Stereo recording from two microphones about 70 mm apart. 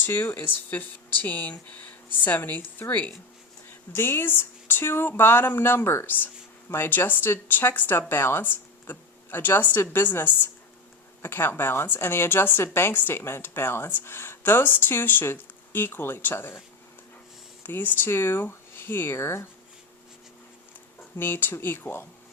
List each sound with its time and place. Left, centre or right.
0.0 s a woman's voice: left
17.7 s a woman's voice: left
21.2 s a woman's voice: left